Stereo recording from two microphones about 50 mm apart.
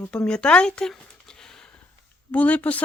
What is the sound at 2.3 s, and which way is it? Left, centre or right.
Speech, left.